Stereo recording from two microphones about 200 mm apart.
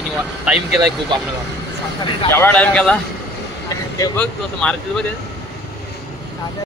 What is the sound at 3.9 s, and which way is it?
Speech, 15° left (ahead or behind).